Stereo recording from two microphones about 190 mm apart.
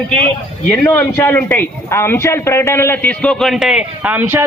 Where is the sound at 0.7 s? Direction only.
10° left (ahead or behind).